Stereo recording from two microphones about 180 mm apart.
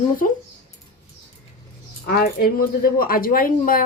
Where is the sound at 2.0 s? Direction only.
60° left (ahead or behind).